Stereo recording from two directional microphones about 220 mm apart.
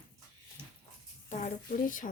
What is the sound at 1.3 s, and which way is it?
Speech, 35° left (ahead or behind).